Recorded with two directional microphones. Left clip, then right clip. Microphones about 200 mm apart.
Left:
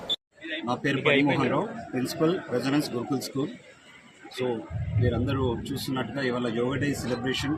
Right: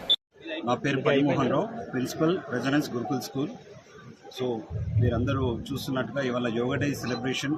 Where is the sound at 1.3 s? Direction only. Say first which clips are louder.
Even; centre (ahead or behind).